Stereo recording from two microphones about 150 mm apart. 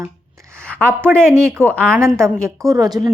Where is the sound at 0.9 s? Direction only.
15° right (ahead or behind).